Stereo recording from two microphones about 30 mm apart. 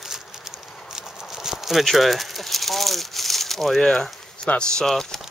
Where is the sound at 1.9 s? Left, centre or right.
Centre.